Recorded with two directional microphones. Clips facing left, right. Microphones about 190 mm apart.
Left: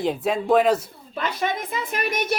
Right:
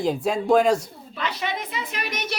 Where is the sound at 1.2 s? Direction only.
50° left (ahead or behind).